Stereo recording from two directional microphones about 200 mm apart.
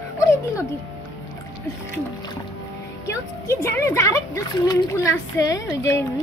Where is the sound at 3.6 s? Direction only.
10° left (ahead or behind).